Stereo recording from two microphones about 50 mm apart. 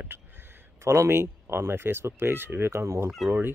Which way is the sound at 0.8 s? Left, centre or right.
Right.